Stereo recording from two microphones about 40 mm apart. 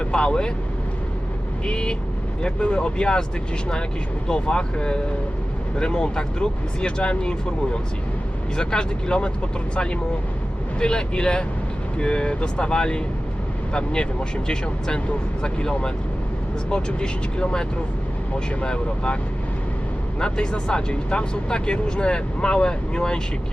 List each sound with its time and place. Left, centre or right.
0.0 s speech: left
1.6 s speech: left
4.3 s speech: left